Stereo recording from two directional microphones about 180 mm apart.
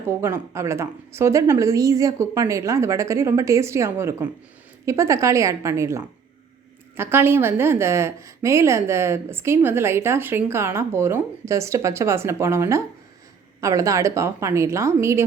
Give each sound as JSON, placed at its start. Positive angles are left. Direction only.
{"t": 0.1, "sound": "a woman's voice", "side_deg": -15}